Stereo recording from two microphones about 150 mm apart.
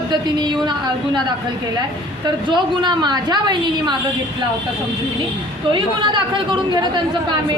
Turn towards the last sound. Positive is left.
turn(degrees=-30)  # may be behind; listen again after turning